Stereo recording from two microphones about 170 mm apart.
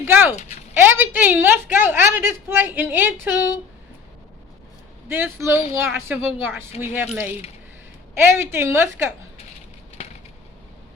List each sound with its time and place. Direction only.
0.0 s a sound: 15° right (ahead or behind)
0.9 s a woman's voice: 10° right (ahead or behind)
5.0 s a woman's voice: 15° right (ahead or behind)